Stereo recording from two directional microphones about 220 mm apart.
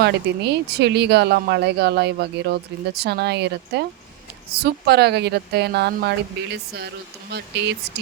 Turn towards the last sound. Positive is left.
turn(degrees=-50)  # may be behind; listen again after turning